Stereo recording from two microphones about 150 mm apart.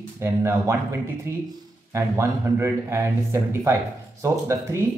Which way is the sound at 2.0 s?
20° right (ahead or behind).